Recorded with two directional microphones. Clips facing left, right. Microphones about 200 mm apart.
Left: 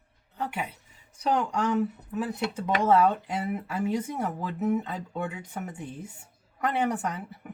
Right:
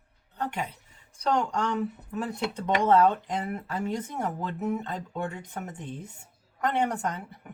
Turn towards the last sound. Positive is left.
turn(degrees=5)  # may be behind; listen again after turning